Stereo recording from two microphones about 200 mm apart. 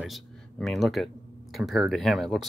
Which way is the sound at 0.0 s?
Centre (ahead or behind).